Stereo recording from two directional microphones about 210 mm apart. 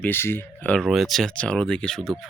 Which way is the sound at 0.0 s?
10° left (ahead or behind).